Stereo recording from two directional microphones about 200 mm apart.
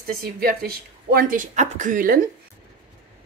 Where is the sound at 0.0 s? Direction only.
50° right (ahead or behind).